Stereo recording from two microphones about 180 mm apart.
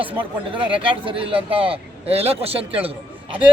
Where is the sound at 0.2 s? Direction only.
30° right (ahead or behind).